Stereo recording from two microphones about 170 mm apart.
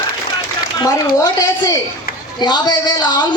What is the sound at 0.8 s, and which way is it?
A man's voice, 25° left (ahead or behind).